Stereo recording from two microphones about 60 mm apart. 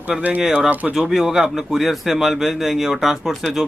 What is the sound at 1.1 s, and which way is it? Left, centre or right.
A man's voice, centre.